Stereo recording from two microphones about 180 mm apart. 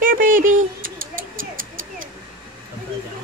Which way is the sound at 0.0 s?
50° right (ahead or behind).